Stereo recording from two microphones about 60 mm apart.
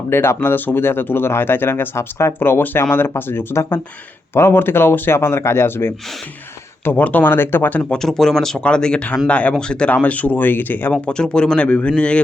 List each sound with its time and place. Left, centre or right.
0.1 s speech: left
6.8 s speech: left
7.9 s speech: centre
9.9 s speech: left
11.0 s speech: centre